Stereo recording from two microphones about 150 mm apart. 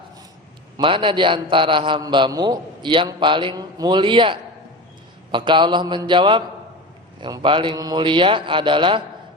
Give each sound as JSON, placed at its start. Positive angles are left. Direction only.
{"t": 0.8, "sound": "a man's voice", "side_deg": -35}